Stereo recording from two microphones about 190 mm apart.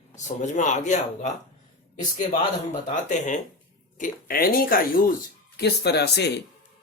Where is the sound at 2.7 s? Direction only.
40° left (ahead or behind).